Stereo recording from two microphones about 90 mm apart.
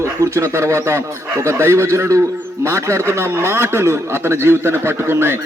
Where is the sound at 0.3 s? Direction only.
30° right (ahead or behind).